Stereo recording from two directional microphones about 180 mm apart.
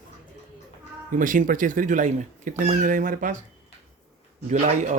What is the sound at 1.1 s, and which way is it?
Speech, 45° right (ahead or behind).